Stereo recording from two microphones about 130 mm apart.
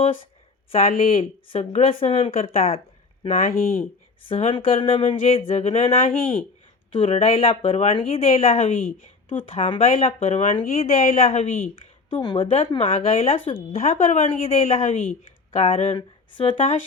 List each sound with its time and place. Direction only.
0.7 s speech: 55° left (ahead or behind)
3.2 s speech: 90° left
4.3 s speech: 55° left (ahead or behind)
4.5 s a woman's voice: 40° left (ahead or behind)
10.4 s a woman's voice: 75° left (ahead or behind); by 11.4 s 50° left (ahead or behind)
11.7 s speech: 35° left (ahead or behind); by 14.4 s 70° left (ahead or behind)
14.4 s speech: 50° left (ahead or behind)